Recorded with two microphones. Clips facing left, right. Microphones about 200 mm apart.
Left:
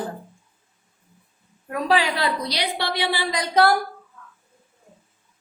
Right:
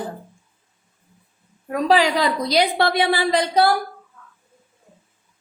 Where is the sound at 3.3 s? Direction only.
30° right (ahead or behind).